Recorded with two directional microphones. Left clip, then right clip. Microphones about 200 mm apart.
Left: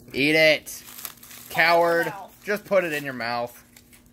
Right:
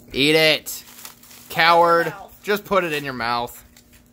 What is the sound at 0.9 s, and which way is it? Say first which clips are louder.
Crumpling: even; 40° left (ahead or behind).